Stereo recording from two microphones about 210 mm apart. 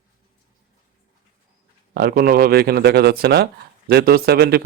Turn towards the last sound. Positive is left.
turn(degrees=-45)  # may be behind; listen again after turning